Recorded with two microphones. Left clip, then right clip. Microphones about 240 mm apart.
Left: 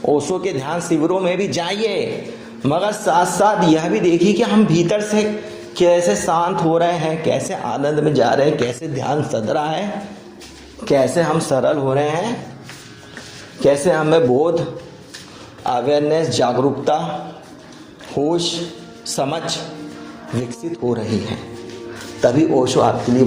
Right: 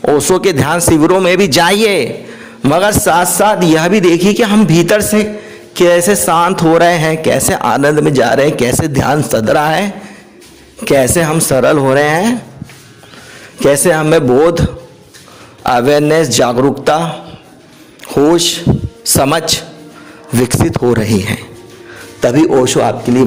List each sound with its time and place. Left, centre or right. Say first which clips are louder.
0.2 s a man's voice: right 10 dB; right
13.6 s a man's voice: right 5 dB; right
15.6 s a man's voice: right 7 dB; right
18.1 s a man's voice: right 9 dB; right
20.7 s a man's voice: right 5 dB; right